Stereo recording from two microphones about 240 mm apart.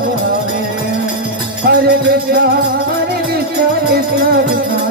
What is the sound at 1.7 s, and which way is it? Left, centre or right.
Music, right.